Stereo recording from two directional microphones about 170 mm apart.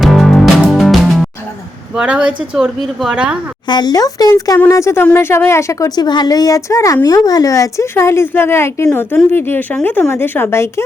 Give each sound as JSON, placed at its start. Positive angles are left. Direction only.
{"t": 0.0, "sound": "music", "side_deg": 0}
{"t": 2.0, "sound": "speech", "side_deg": -5}
{"t": 3.7, "sound": "a woman's voice", "side_deg": 25}